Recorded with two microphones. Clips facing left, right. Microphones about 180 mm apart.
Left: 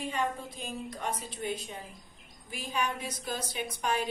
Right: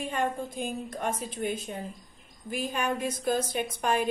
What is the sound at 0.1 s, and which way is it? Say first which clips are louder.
A woman's voice: right 3 dB; 50° right (ahead or behind).